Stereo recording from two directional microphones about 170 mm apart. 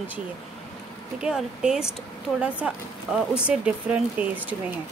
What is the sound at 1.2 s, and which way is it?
Speech, 5° right (ahead or behind).